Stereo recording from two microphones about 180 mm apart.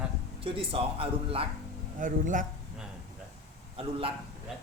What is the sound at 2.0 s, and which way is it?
Speech, 45° right (ahead or behind).